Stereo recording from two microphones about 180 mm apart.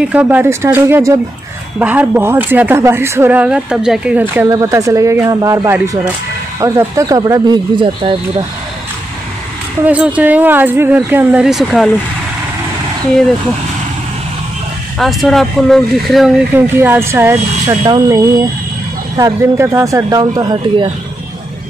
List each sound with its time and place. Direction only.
0.0 s speech: 5° right (ahead or behind); by 8.2 s 25° right (ahead or behind)
9.8 s speech: 5° right (ahead or behind)
15.0 s speech: centre (ahead or behind)
16.5 s speech: 10° right (ahead or behind)